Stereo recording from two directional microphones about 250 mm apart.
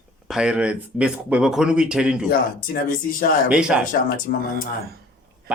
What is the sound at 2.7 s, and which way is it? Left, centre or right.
Speech, left.